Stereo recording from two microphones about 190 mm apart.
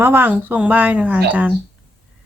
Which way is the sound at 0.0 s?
10° right (ahead or behind).